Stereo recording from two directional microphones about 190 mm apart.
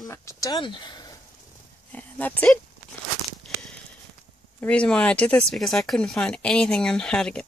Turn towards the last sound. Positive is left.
turn(degrees=5)  # may be behind; listen again after turning